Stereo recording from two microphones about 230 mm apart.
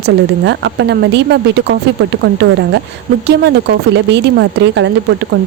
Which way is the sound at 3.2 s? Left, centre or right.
Right.